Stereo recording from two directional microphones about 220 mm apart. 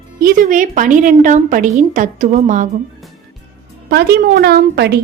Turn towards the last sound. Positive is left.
turn(degrees=-45)  # may be behind; listen again after turning